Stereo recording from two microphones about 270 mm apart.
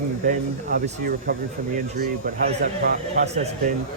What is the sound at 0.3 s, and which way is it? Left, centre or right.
Speech, right.